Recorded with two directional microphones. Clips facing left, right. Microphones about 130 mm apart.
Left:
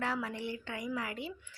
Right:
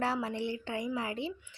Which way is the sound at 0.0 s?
30° right (ahead or behind).